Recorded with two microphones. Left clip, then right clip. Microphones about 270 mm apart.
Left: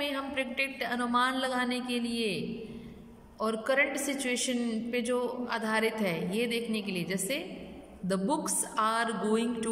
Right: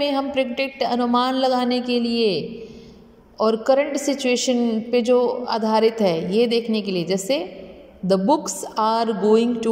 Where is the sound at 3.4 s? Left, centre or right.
Centre.